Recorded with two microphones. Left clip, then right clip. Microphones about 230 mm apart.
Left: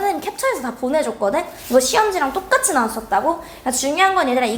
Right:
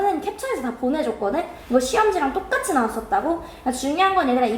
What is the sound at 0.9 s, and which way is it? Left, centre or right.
Speech, left.